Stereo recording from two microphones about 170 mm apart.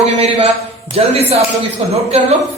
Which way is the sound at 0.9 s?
35° right (ahead or behind).